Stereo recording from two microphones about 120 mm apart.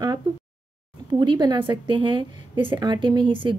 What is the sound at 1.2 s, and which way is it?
Speech, 40° right (ahead or behind).